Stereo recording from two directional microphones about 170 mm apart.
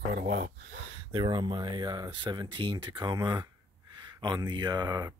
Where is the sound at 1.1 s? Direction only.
25° right (ahead or behind).